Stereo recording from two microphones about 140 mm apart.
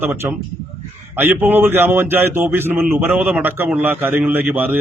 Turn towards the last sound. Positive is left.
turn(degrees=-15)  # may be behind; listen again after turning